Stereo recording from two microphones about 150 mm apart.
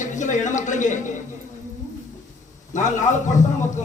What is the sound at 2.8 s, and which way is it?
Speech, 55° left (ahead or behind).